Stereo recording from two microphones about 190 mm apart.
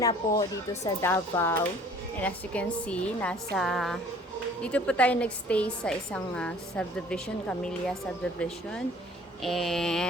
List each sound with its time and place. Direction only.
0.0 s speech: 20° left (ahead or behind); by 10.1 s centre (ahead or behind)